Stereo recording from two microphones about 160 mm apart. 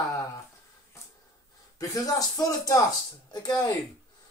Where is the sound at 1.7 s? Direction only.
20° left (ahead or behind).